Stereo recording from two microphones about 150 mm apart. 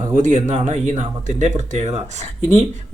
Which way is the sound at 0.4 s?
50° right (ahead or behind).